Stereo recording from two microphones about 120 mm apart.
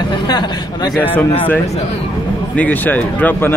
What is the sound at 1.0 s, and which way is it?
Speech, 15° left (ahead or behind).